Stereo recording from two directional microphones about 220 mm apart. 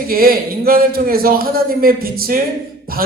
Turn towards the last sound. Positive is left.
turn(degrees=-45)  # may be behind; listen again after turning